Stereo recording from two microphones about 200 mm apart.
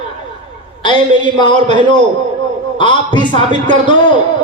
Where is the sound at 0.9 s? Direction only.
25° left (ahead or behind).